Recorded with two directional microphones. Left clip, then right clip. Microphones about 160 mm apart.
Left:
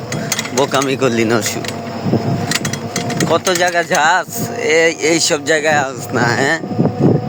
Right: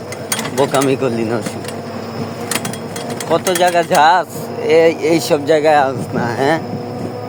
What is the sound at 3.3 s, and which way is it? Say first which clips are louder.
Speech: right 1 dB; 15° left (ahead or behind).